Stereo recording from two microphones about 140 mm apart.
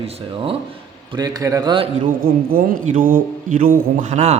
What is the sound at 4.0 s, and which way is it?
Speech, 55° right (ahead or behind).